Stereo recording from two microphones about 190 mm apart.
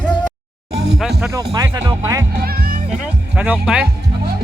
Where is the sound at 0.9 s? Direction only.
Centre (ahead or behind).